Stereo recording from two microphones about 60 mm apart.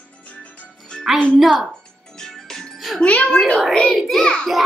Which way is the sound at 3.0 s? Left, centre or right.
Centre.